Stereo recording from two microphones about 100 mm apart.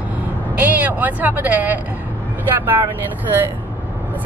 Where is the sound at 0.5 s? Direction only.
15° right (ahead or behind).